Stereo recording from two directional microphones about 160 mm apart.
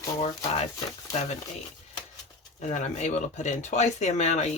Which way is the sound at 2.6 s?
45° left (ahead or behind).